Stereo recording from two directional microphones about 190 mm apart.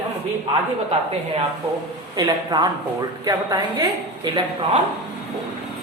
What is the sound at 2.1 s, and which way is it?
A woman's voice, 20° right (ahead or behind).